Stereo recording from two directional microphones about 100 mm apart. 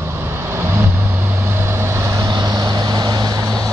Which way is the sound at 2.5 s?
45° right (ahead or behind).